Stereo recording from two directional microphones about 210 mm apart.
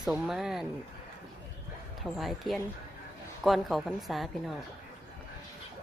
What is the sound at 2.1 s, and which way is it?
A woman's voice, centre (ahead or behind).